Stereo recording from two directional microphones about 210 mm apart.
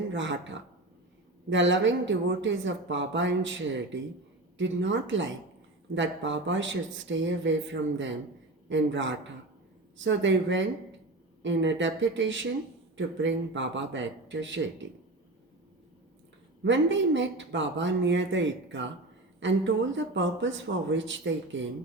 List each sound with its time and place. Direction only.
0.1 s speech: 60° right (ahead or behind)
1.5 s speech: 60° right (ahead or behind)
4.5 s speech: 60° right (ahead or behind)
16.6 s speech: 60° right (ahead or behind)